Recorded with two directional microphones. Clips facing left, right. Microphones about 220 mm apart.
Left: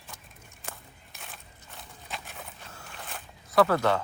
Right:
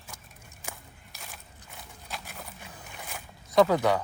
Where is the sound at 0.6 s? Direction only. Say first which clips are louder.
Even; centre (ahead or behind).